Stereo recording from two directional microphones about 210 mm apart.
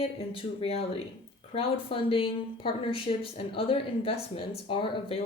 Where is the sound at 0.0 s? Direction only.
30° left (ahead or behind).